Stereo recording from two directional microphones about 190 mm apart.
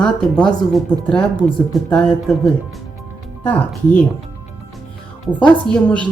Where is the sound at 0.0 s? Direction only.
5° left (ahead or behind).